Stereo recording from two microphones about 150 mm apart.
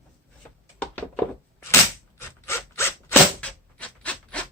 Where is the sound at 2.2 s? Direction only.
15° left (ahead or behind).